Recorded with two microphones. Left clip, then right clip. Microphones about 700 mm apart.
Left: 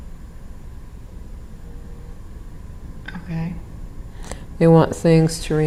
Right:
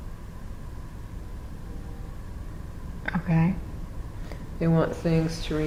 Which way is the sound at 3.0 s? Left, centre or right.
Right.